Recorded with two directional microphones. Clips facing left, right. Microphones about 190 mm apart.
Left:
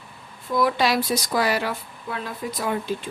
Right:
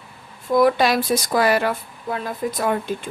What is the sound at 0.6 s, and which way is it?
Speech, 50° right (ahead or behind).